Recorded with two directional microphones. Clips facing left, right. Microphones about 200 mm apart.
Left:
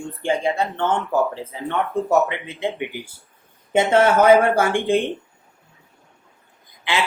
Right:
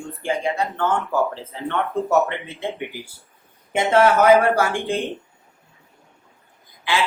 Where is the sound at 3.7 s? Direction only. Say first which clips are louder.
Left 1 dB; 25° left (ahead or behind).